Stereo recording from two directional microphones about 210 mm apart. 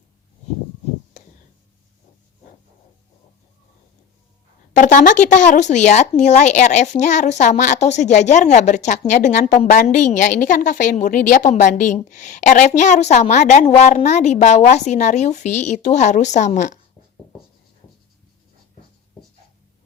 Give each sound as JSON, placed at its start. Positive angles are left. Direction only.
{"t": 4.7, "sound": "speech", "side_deg": 35}